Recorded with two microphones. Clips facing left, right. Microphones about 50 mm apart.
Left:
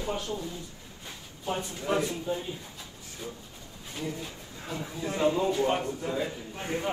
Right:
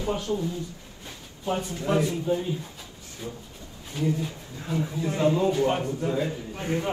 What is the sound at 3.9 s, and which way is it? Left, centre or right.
Speech, centre.